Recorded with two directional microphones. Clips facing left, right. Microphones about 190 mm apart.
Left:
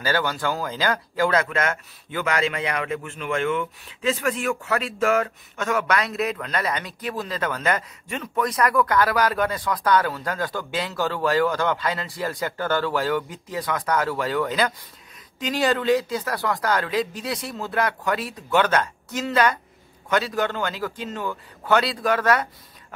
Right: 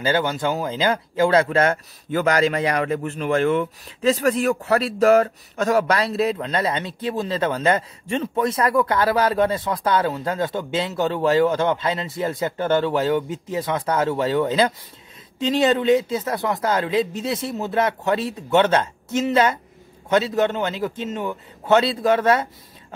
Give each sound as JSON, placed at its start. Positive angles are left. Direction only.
{"t": 0.0, "sound": "speech", "side_deg": -25}